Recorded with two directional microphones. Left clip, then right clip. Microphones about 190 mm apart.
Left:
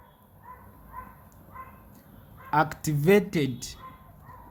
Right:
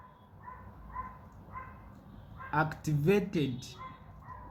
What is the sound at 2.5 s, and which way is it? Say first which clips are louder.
Speech: left 7 dB; 55° left (ahead or behind).